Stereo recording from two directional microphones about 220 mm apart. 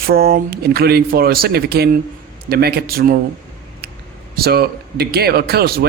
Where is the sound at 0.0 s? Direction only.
45° right (ahead or behind).